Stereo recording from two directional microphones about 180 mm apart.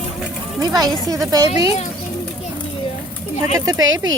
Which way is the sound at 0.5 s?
20° right (ahead or behind).